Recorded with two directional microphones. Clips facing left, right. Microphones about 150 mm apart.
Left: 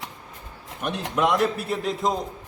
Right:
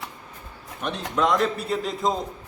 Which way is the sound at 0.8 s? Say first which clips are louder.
Even; 5° left (ahead or behind).